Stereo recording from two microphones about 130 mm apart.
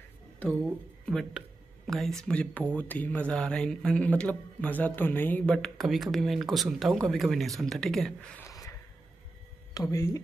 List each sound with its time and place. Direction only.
1.0 s speech: centre (ahead or behind)
8.5 s a sound: 25° left (ahead or behind)
9.8 s speech: 25° left (ahead or behind)